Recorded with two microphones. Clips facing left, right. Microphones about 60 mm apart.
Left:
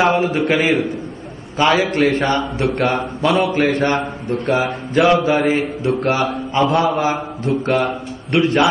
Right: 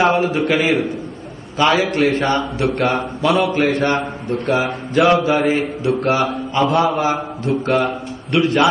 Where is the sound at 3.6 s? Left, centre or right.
Left.